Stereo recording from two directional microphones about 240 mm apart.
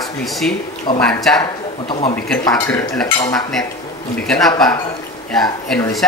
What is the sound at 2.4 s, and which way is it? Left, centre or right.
Speech, centre.